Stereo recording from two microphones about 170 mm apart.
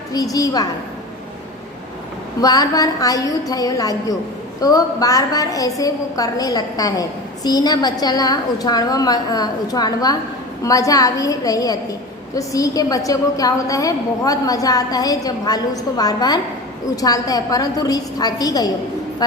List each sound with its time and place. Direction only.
0.1 s a woman's voice: 20° left (ahead or behind)
2.4 s a woman's voice: 20° left (ahead or behind)